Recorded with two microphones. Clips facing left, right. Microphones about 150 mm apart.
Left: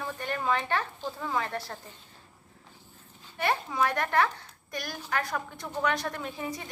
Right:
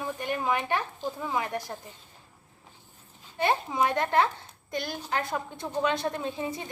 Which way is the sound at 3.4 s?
20° right (ahead or behind).